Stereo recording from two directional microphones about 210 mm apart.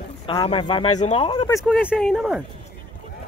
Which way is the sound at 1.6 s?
5° right (ahead or behind).